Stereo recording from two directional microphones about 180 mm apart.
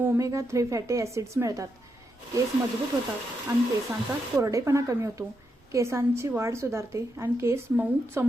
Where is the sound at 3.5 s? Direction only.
20° right (ahead or behind).